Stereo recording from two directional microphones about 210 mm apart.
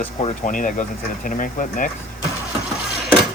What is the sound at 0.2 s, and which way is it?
Speech, 30° left (ahead or behind).